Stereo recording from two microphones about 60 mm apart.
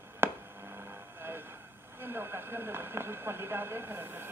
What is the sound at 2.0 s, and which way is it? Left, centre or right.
Speech, right.